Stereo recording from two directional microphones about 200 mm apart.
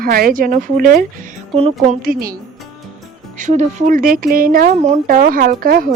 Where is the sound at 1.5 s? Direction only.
30° right (ahead or behind).